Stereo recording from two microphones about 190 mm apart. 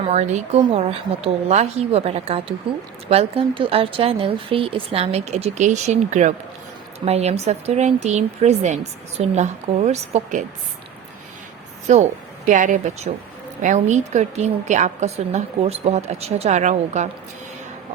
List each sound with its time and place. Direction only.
0.0 s a woman's voice: 35° right (ahead or behind)
11.9 s a woman's voice: 40° right (ahead or behind)